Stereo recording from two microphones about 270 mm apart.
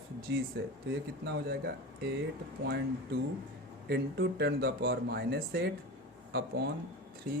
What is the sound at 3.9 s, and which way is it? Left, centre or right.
Speech, right.